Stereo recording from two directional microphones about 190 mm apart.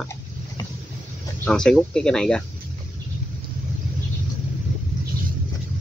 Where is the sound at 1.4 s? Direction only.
5° left (ahead or behind).